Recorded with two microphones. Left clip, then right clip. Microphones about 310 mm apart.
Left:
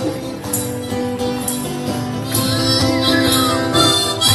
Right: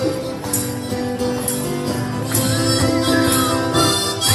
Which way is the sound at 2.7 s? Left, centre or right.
Centre.